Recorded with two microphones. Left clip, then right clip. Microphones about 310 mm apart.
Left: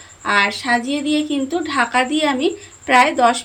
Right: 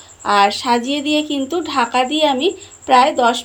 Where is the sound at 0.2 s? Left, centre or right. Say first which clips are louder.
Right 3 dB; centre.